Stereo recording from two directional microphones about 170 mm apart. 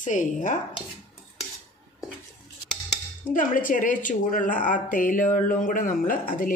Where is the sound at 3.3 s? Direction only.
50° left (ahead or behind).